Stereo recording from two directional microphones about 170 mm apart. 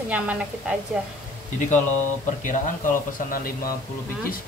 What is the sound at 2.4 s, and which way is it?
Speech, 50° left (ahead or behind).